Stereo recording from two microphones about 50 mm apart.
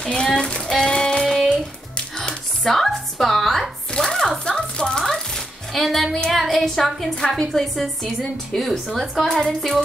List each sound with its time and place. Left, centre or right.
0.0 s music: centre
1.2 s music: centre
1.5 s music: centre
2.6 s speech: centre
4.0 s music: centre
6.3 s a woman's voice: centre
9.0 s a woman's voice: centre